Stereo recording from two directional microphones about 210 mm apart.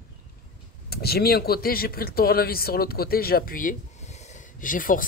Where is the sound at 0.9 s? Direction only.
50° left (ahead or behind).